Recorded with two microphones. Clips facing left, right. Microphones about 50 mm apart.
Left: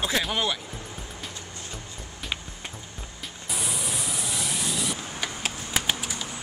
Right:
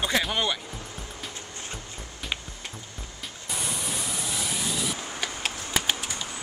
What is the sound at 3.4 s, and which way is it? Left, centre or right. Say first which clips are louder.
Vehicle: even; centre.